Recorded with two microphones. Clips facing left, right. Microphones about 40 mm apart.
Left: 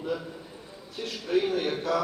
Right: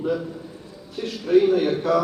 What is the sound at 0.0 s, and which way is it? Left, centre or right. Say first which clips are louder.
A man's voice: right 7 dB; centre.